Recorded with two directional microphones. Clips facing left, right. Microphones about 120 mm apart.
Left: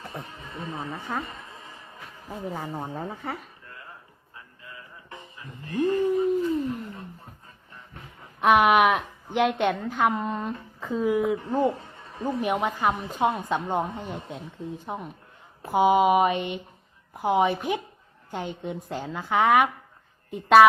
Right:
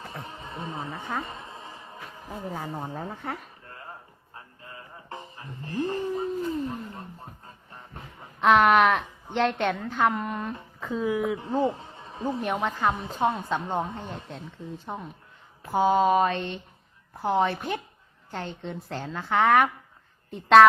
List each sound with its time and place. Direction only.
0.2 s speech: 25° right (ahead or behind)
0.8 s speech: centre (ahead or behind)
1.2 s music: 30° right (ahead or behind)
2.2 s speech: centre (ahead or behind)
3.7 s music: 35° right (ahead or behind)
6.1 s a sound: 30° right (ahead or behind)
8.4 s a woman's voice: 10° left (ahead or behind)
10.8 s speech: 5° left (ahead or behind)
11.3 s a man's voice: 20° right (ahead or behind)
12.4 s a woman's voice: 10° left (ahead or behind)